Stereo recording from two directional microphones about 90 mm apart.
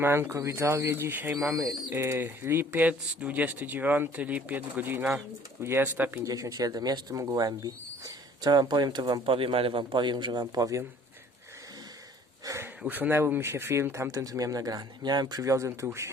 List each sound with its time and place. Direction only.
0.0 s speech: 25° right (ahead or behind)
1.5 s speech: 35° right (ahead or behind)
6.2 s speech: 40° right (ahead or behind)
9.2 s a man's voice: 85° right; by 10.8 s 40° right (ahead or behind)
12.8 s speech: 20° right (ahead or behind)